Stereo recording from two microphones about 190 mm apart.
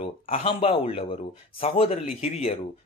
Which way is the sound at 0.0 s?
30° left (ahead or behind).